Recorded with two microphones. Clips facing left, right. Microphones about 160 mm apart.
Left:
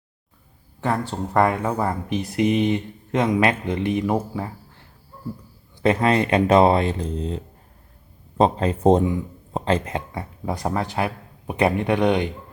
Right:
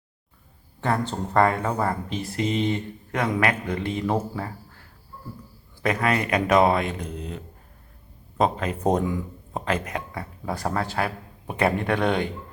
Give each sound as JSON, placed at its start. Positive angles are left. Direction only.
{"t": 0.8, "sound": "speech", "side_deg": 10}
{"t": 5.8, "sound": "speech", "side_deg": 30}